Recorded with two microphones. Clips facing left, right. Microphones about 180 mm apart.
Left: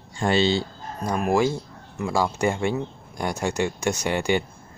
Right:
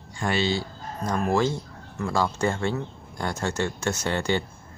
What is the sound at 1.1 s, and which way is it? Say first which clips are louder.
Speech: left 2 dB; 15° left (ahead or behind).